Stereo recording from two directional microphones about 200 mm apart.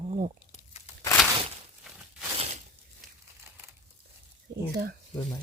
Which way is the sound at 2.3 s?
35° right (ahead or behind).